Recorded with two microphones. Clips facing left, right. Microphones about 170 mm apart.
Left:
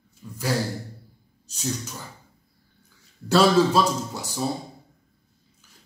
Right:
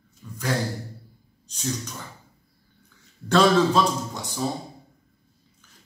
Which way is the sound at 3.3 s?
5° left (ahead or behind).